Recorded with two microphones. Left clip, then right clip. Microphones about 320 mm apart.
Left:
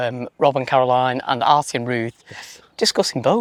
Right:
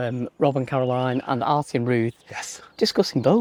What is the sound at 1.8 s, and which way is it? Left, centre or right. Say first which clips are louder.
Speech: even; left.